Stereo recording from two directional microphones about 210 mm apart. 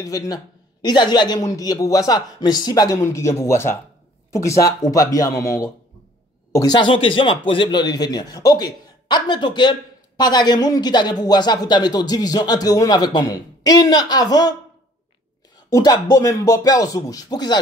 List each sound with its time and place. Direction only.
0.0 s a man's voice: 15° left (ahead or behind)
15.7 s a man's voice: 20° left (ahead or behind)